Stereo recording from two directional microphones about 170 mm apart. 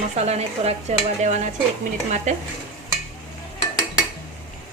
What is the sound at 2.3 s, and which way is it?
Stir, 45° right (ahead or behind).